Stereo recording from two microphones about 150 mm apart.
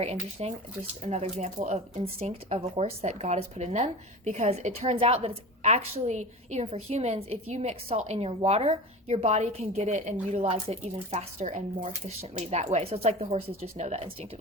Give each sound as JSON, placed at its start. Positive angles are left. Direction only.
{"t": 0.0, "sound": "a woman's voice", "side_deg": -45}